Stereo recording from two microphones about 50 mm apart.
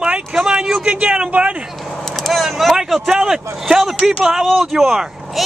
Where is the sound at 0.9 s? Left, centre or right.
Right.